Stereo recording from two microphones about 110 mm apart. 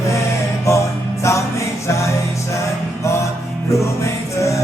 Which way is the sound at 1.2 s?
25° left (ahead or behind).